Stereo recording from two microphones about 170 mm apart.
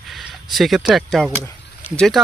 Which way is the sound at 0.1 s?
Centre (ahead or behind).